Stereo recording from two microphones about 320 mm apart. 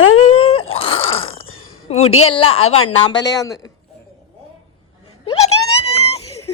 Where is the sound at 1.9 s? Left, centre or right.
Centre.